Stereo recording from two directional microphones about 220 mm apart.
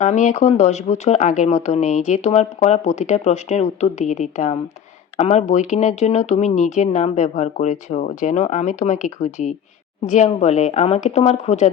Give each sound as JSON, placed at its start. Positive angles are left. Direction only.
{"t": 0.0, "sound": "speech", "side_deg": 35}